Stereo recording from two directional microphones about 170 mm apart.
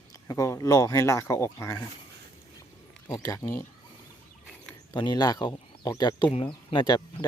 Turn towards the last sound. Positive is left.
turn(degrees=25)  # may be behind; listen again after turning